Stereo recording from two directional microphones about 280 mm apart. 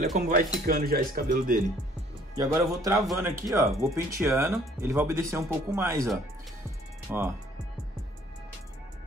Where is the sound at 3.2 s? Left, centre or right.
Centre.